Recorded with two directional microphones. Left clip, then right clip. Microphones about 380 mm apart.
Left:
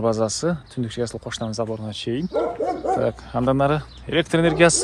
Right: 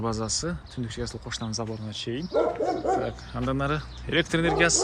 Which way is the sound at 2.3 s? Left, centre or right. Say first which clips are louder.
Even; left.